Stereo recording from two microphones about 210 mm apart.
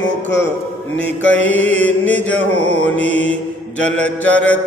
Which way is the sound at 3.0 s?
10° left (ahead or behind).